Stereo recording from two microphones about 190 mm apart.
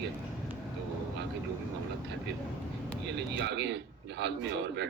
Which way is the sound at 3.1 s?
65° right (ahead or behind).